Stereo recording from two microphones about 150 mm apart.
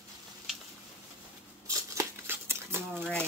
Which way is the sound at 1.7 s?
20° right (ahead or behind).